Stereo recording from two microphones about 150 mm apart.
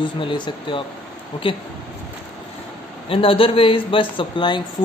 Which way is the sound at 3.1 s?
35° left (ahead or behind).